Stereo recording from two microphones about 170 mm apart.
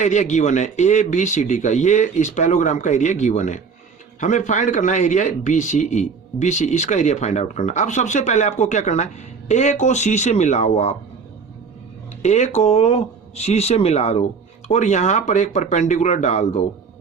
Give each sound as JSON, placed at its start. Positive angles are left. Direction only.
{"t": 0.0, "sound": "a man's voice", "side_deg": 45}
{"t": 12.2, "sound": "a man's voice", "side_deg": 40}